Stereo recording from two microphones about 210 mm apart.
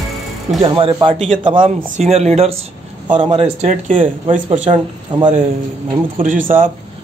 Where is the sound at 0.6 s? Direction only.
25° right (ahead or behind).